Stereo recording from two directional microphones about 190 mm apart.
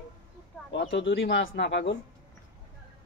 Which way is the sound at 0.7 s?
70° left (ahead or behind).